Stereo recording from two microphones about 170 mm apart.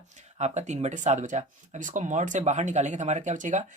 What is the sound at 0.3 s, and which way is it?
Speech, 45° right (ahead or behind).